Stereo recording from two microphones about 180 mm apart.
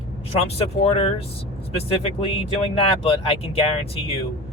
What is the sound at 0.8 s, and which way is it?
Speech, 35° left (ahead or behind).